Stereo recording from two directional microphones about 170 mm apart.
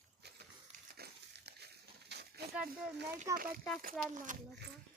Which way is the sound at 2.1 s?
75° right (ahead or behind).